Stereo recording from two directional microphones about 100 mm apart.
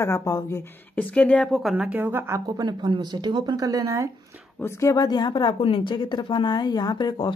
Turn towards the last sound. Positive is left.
turn(degrees=50)  # may be behind; listen again after turning